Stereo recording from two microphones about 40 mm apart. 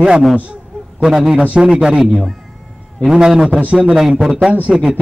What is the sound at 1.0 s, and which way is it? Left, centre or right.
Speech, centre.